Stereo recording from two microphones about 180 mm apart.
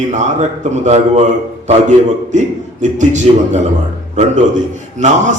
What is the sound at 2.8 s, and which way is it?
Speech, 40° right (ahead or behind).